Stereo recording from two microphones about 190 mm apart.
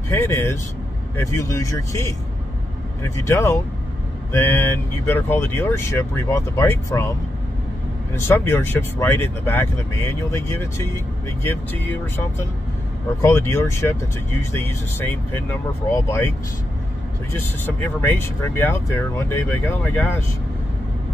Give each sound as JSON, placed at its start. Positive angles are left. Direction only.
{"t": 0.1, "sound": "speech", "side_deg": 15}
{"t": 8.3, "sound": "speech", "side_deg": 10}
{"t": 13.2, "sound": "speech", "side_deg": 15}
{"t": 17.3, "sound": "speech", "side_deg": 10}